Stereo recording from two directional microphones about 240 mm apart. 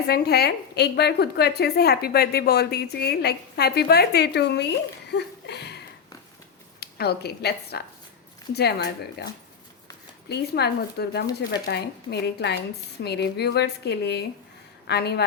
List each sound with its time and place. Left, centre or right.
0.1 s a woman's voice: left
5.1 s a sound: left
6.7 s speech: left
10.2 s speech: left